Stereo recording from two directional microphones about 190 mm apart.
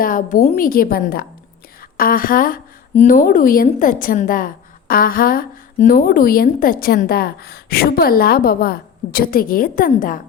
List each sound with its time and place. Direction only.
0.0 s a woman's voice: 45° left (ahead or behind)